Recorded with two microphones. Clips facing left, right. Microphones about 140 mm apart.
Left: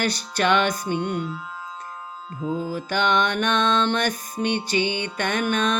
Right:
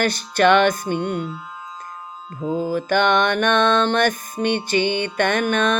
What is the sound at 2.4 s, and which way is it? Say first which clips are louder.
Mantra: right 5 dB; 45° right (ahead or behind).